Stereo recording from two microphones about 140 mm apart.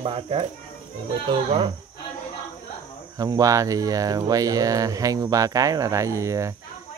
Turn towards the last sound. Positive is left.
turn(degrees=-20)  # may be behind; listen again after turning